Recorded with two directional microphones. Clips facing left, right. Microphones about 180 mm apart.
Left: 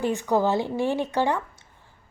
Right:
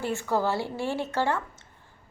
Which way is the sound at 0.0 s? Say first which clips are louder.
Left 4 dB; 15° left (ahead or behind).